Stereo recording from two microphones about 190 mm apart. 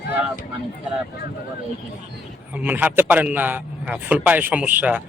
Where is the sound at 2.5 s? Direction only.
10° right (ahead or behind).